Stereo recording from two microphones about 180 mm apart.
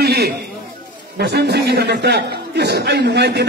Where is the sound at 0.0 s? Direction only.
65° right (ahead or behind).